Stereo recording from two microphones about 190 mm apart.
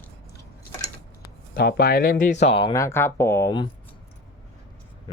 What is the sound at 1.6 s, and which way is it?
Speech, 60° left (ahead or behind).